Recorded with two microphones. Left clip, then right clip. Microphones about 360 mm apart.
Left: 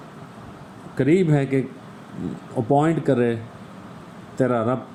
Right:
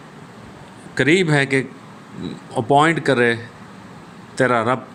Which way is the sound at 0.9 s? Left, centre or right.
Right.